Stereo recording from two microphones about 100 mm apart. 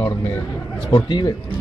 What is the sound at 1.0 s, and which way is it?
Speech, 40° left (ahead or behind).